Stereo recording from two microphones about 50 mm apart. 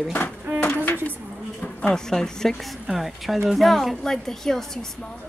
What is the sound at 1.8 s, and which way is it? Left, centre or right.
A woman's voice, centre.